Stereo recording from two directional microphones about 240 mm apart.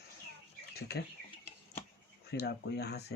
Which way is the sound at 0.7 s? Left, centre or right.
Left.